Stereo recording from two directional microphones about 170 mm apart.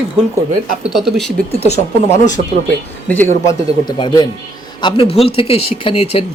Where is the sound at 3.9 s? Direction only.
25° left (ahead or behind).